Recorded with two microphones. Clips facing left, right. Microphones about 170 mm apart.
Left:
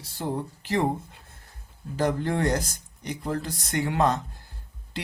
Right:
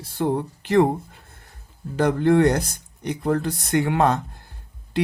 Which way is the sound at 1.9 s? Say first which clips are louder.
Right 8 dB; 65° right (ahead or behind).